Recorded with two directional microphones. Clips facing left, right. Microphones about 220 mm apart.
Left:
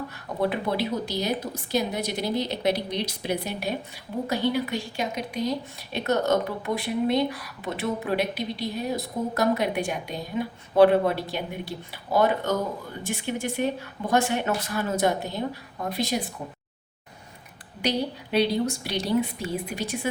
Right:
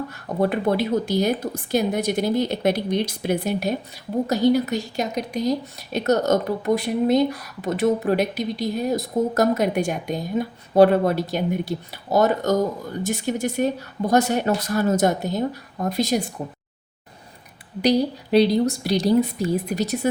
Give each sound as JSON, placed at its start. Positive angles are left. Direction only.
{"t": 0.3, "sound": "speech", "side_deg": -45}
{"t": 17.8, "sound": "speech", "side_deg": -40}